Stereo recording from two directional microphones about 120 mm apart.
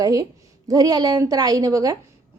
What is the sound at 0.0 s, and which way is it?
A woman's voice, 30° right (ahead or behind).